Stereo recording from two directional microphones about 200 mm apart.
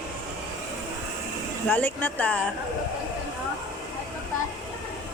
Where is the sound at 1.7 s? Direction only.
10° left (ahead or behind).